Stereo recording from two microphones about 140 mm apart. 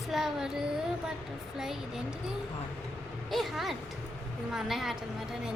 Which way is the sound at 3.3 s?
Centre (ahead or behind).